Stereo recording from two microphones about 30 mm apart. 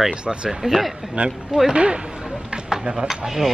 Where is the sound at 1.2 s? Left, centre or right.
Right.